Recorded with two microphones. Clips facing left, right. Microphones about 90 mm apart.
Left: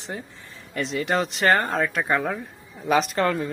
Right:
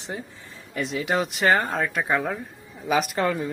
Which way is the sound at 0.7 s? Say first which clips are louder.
Left 1 dB; 5° right (ahead or behind).